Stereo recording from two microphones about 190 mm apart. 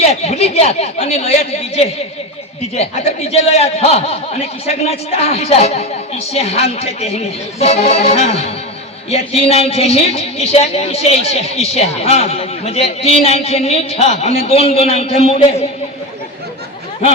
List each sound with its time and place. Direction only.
0.0 s a woman's voice: 35° left (ahead or behind)